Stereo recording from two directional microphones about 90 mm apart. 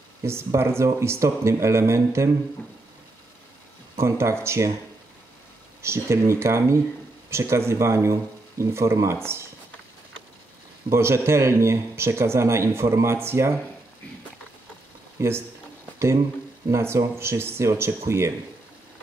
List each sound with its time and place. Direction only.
0.2 s speech: 30° right (ahead or behind)
4.0 s speech: 30° right (ahead or behind)
5.8 s speech: 30° right (ahead or behind)
10.9 s speech: 30° right (ahead or behind)
15.1 s speech: 30° right (ahead or behind)
16.7 s speech: 30° right (ahead or behind)